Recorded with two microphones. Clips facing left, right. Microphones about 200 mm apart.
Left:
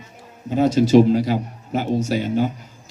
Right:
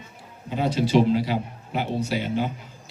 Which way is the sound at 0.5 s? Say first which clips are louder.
Left 7 dB; 45° left (ahead or behind).